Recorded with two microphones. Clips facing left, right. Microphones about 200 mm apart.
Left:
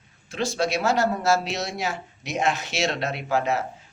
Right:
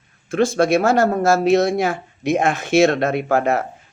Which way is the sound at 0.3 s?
50° right (ahead or behind).